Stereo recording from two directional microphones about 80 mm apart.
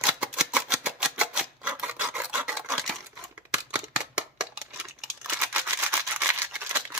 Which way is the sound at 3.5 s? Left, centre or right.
Centre.